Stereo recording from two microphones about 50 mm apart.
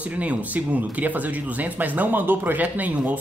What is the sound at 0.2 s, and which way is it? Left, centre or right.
Speech, right.